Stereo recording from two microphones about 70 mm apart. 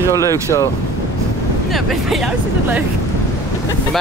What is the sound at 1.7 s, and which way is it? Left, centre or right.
Speech, centre.